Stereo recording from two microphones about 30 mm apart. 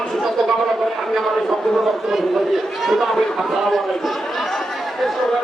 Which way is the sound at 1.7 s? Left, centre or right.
Centre.